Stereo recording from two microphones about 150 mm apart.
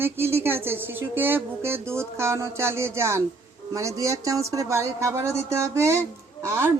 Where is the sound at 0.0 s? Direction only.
15° right (ahead or behind).